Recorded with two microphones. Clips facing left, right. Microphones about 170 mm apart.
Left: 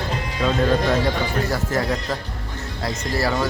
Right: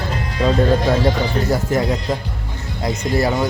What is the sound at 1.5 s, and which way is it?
Speech, 20° right (ahead or behind).